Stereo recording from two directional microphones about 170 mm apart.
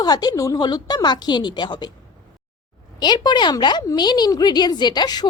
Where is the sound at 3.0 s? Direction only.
25° left (ahead or behind).